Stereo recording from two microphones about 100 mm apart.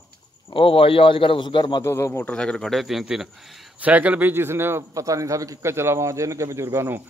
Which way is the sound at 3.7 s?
15° right (ahead or behind).